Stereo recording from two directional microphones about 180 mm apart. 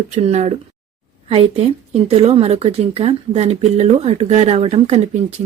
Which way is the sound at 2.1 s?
35° right (ahead or behind).